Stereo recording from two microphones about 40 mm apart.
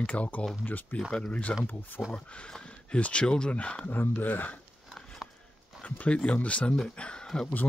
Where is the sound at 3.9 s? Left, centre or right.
Left.